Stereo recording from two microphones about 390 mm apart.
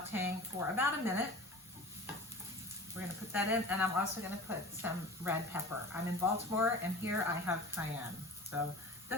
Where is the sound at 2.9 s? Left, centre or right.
Centre.